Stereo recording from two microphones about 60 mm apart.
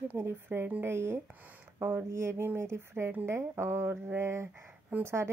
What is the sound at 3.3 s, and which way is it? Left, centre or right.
Speech, right.